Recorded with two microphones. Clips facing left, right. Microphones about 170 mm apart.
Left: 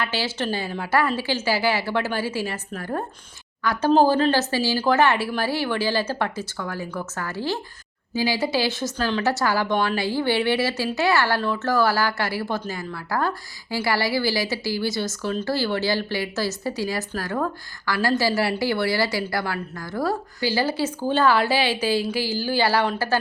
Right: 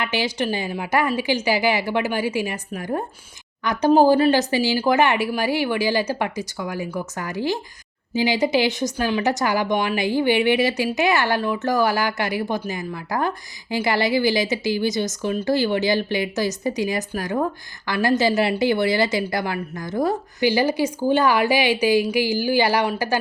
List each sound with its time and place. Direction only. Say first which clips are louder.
0.0 s a woman's voice: right 3 dB; 15° right (ahead or behind)